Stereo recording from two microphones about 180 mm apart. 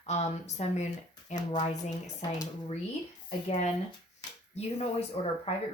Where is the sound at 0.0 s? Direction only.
40° left (ahead or behind).